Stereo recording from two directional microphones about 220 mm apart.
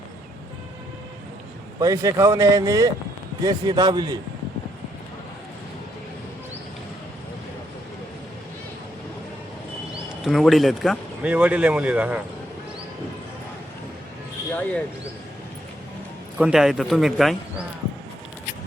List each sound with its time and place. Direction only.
1.8 s a man's voice: 15° right (ahead or behind)
10.2 s speech: centre (ahead or behind)
16.4 s speech: 5° right (ahead or behind)